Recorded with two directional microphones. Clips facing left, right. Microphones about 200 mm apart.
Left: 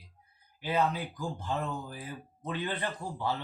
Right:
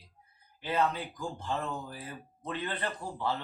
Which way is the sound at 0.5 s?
10° left (ahead or behind).